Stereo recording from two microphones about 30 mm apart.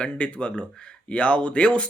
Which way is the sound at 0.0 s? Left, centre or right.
Left.